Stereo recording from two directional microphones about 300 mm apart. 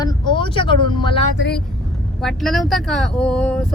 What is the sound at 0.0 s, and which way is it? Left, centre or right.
Speech, centre.